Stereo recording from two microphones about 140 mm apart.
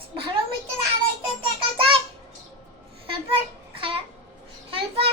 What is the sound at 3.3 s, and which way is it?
Child singing, 40° right (ahead or behind).